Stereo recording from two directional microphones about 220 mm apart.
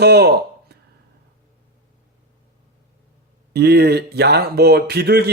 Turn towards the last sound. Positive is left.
turn(degrees=-45)  # may be behind; listen again after turning